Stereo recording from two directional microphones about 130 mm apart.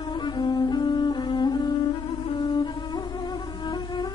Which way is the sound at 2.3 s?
35° left (ahead or behind).